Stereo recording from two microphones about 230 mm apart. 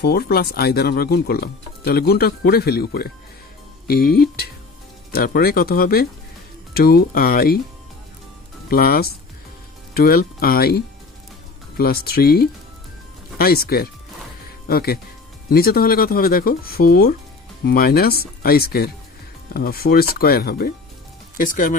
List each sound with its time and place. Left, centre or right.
0.0 s speech: left
5.1 s speech: left
8.6 s speech: left